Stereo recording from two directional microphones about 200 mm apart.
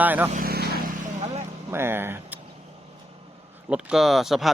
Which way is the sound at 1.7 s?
10° right (ahead or behind).